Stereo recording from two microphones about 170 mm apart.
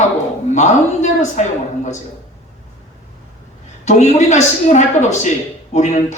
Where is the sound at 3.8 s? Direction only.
45° left (ahead or behind).